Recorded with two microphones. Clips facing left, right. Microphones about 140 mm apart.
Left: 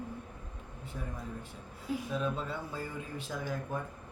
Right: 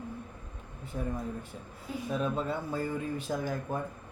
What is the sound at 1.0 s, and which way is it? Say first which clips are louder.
Speech: right 7 dB; 40° right (ahead or behind).